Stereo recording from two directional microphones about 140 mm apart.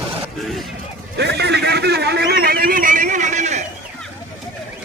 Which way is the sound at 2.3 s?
90° right.